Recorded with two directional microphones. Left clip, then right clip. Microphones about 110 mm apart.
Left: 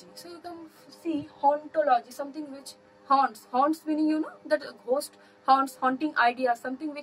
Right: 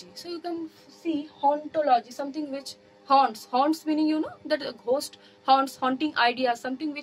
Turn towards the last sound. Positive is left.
turn(degrees=-25)  # may be behind; listen again after turning